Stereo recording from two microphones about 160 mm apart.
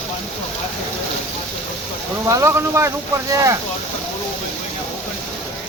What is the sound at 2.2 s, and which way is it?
Speech, 15° right (ahead or behind).